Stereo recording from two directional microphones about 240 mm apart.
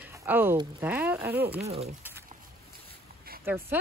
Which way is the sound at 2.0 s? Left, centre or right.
Centre.